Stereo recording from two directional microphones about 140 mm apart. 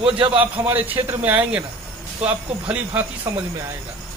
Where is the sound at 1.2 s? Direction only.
10° right (ahead or behind).